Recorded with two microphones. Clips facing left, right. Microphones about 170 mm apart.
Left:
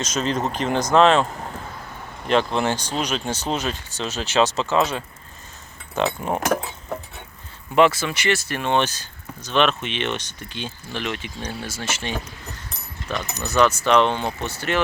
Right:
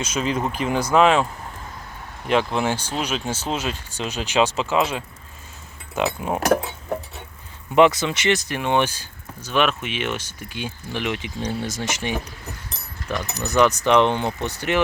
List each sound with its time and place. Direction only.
0.0 s speech: 10° right (ahead or behind)
7.8 s speech: 20° right (ahead or behind)